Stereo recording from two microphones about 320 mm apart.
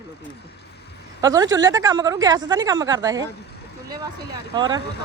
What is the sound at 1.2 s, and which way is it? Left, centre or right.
A woman's voice, centre.